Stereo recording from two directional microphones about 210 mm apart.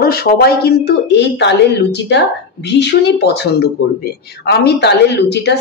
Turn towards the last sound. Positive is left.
turn(degrees=55)  # may be behind; listen again after turning